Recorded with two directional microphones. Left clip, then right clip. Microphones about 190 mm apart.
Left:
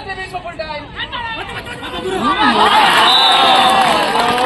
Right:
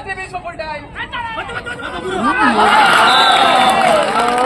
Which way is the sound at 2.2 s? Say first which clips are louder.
Even; 10° left (ahead or behind).